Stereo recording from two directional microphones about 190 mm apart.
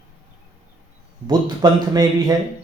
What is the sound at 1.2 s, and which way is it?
Speech, 20° right (ahead or behind).